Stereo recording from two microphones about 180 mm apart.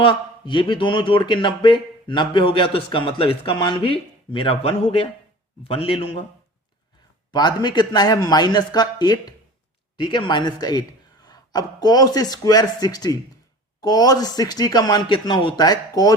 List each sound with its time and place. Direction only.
0.0 s a man's voice: 30° left (ahead or behind)
7.3 s speech: 25° left (ahead or behind)